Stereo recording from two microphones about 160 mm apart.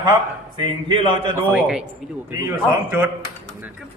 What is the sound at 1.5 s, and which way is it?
A man's voice, 5° right (ahead or behind).